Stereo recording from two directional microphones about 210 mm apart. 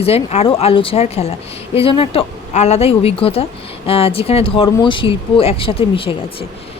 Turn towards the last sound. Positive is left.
turn(degrees=25)  # may be behind; listen again after turning